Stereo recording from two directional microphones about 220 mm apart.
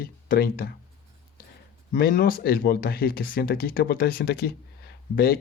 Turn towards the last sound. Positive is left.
turn(degrees=45)  # may be behind; listen again after turning